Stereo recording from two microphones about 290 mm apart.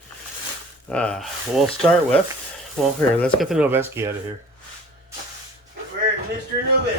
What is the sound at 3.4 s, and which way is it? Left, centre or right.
Speech, centre.